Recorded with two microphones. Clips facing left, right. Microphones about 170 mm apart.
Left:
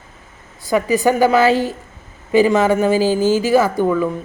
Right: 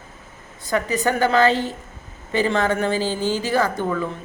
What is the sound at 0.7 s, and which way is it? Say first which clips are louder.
Speech: left 6 dB; 15° left (ahead or behind).